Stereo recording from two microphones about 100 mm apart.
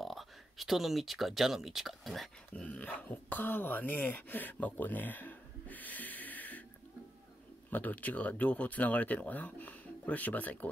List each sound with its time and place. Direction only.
0.0 s speech: centre (ahead or behind)
2.5 s speech: 15° left (ahead or behind)
7.7 s speech: 15° left (ahead or behind)